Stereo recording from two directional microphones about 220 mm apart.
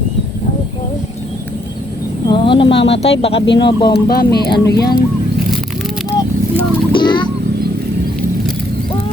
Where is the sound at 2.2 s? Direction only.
20° left (ahead or behind).